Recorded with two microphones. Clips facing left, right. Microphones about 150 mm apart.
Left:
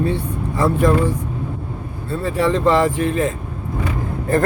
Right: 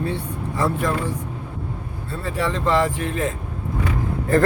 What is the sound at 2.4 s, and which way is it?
Speech, 20° left (ahead or behind).